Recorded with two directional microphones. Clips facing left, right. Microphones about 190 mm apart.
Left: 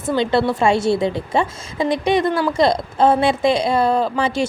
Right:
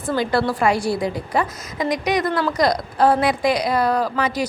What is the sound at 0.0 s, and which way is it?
Speech, 25° left (ahead or behind).